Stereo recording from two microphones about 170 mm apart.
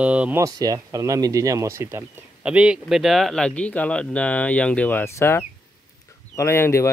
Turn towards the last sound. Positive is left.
turn(degrees=15)  # may be behind; listen again after turning